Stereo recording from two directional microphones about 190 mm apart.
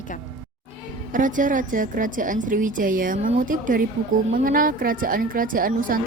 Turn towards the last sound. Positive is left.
turn(degrees=-50)  # may be behind; listen again after turning